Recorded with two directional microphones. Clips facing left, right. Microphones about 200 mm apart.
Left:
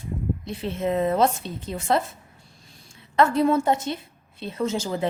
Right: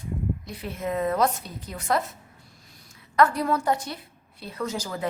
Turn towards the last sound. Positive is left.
turn(degrees=25)  # may be behind; listen again after turning